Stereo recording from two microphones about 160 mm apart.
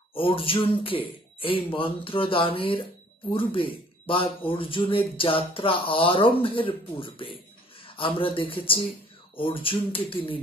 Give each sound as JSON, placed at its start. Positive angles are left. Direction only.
{"t": 0.1, "sound": "speech", "side_deg": 35}